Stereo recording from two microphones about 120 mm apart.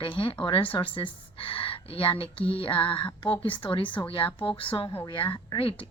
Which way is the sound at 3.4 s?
45° left (ahead or behind).